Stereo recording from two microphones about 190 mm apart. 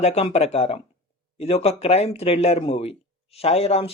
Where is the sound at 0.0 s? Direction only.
35° left (ahead or behind).